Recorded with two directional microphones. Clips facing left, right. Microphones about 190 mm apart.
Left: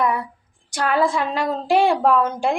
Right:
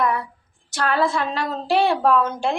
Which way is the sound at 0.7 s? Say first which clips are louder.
Left 1 dB; 15° left (ahead or behind).